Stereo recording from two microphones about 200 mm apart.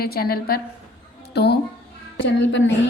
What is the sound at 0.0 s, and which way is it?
A woman's voice, 50° left (ahead or behind).